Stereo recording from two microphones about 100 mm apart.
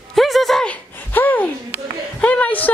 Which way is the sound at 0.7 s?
20° left (ahead or behind).